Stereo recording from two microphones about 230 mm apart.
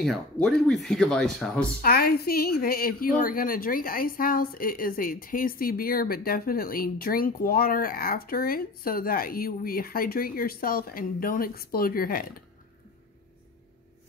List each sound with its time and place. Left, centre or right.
0.0 s speech: centre
1.8 s a woman's voice: left